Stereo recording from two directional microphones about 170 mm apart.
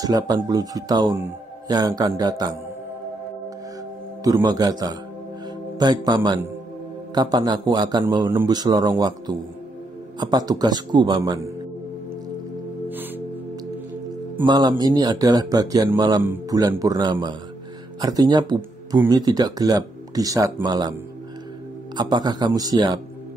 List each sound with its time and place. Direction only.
0.0 s speech: 20° right (ahead or behind)
4.2 s speech: 20° right (ahead or behind)
14.4 s speech: 25° right (ahead or behind)
21.9 s speech: 25° right (ahead or behind)